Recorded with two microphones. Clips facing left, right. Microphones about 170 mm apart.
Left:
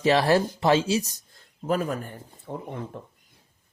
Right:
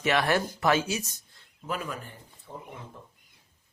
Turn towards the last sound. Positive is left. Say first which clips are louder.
# left 9 dB
turn(degrees=65)  # may be behind; listen again after turning